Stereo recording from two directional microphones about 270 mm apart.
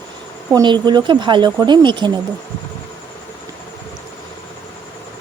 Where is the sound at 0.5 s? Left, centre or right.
Centre.